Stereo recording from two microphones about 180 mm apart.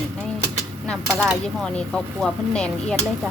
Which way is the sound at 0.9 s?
5° left (ahead or behind).